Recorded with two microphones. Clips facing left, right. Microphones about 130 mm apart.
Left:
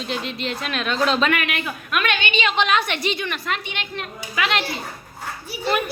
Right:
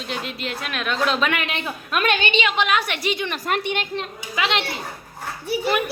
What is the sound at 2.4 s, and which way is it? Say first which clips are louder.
Speech: left 1 dB; 10° right (ahead or behind).